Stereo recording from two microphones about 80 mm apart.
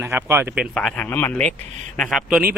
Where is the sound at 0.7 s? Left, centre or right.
Centre.